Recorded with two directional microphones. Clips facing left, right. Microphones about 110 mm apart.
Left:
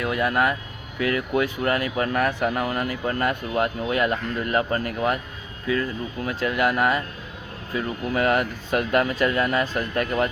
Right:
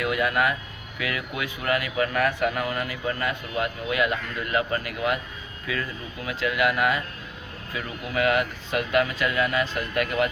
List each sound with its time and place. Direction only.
0.0 s speech: 35° left (ahead or behind)
6.2 s speech: 40° left (ahead or behind)